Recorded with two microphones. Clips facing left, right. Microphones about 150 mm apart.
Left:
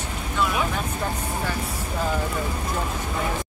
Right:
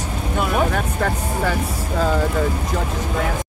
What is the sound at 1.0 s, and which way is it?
Speech, 75° right (ahead or behind).